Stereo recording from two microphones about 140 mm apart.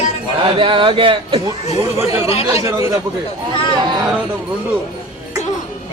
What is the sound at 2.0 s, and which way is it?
Speech, 20° right (ahead or behind).